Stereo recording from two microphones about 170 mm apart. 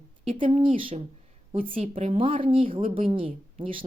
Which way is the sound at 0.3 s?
30° right (ahead or behind).